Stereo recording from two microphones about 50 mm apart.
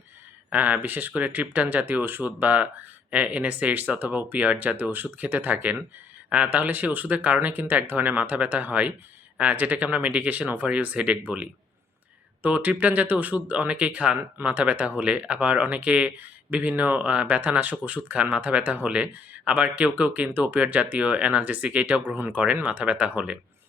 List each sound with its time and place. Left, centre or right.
0.5 s speech: right